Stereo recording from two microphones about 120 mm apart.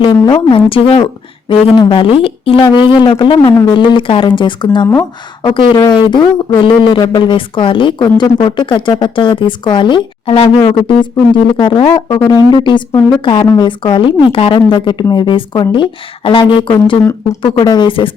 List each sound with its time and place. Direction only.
0.0 s speech: 40° left (ahead or behind)